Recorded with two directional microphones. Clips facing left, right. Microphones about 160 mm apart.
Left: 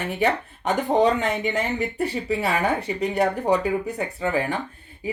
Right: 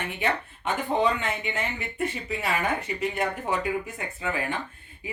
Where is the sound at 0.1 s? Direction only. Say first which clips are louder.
Left 8 dB; 40° left (ahead or behind).